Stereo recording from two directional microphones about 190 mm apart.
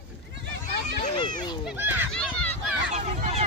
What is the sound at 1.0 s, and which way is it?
Children playing, 30° left (ahead or behind).